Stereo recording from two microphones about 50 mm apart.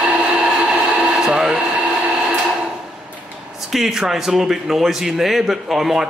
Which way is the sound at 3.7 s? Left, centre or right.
Centre.